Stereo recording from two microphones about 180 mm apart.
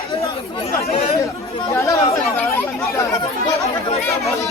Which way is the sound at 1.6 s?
15° left (ahead or behind).